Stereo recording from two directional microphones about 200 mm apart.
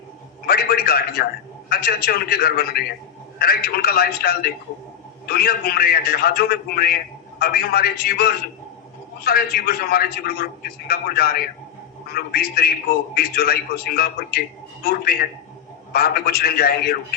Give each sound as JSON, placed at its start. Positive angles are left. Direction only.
{"t": 0.4, "sound": "a man's voice", "side_deg": 50}
{"t": 15.9, "sound": "a man's voice", "side_deg": 50}